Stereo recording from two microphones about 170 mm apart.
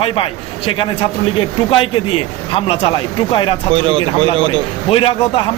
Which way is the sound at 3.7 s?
30° right (ahead or behind).